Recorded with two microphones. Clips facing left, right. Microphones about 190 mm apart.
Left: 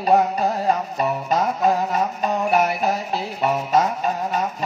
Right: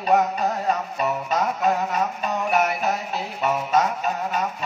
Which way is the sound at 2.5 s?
30° left (ahead or behind).